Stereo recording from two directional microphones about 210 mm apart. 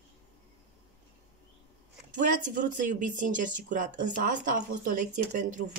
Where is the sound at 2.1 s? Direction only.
35° right (ahead or behind).